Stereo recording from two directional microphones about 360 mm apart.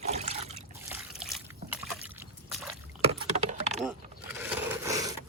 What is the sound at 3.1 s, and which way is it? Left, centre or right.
Rowboat, centre.